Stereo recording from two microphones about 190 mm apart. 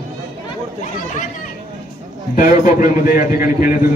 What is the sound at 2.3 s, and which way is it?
A man's voice, 45° left (ahead or behind).